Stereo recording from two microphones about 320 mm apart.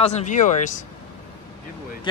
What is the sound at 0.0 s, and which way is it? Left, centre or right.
Speech, left.